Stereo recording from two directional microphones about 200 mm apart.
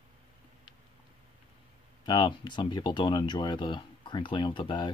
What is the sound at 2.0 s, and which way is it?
Speech, 25° left (ahead or behind).